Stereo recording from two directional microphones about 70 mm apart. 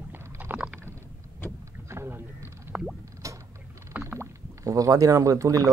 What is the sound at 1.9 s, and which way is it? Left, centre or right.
Vehicle, right.